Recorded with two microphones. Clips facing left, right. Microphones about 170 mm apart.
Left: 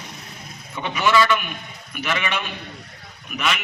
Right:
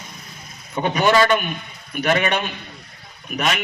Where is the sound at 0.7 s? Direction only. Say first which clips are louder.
Right 3 dB; 40° right (ahead or behind).